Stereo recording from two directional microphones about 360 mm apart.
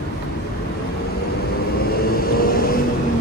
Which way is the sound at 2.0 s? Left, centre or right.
Left.